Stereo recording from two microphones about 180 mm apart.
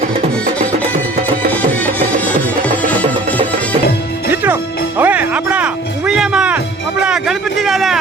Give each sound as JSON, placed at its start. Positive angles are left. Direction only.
{"t": 2.9, "sound": "music", "side_deg": 10}
{"t": 4.9, "sound": "music", "side_deg": -10}
{"t": 7.0, "sound": "a sound", "side_deg": -5}